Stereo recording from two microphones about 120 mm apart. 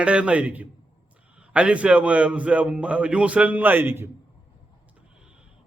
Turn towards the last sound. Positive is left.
turn(degrees=-20)  # may be behind; listen again after turning